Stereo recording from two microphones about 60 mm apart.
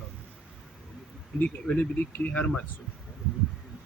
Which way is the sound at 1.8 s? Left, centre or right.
Left.